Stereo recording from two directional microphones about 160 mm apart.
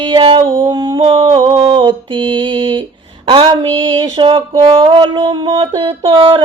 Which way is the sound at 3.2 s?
30° right (ahead or behind).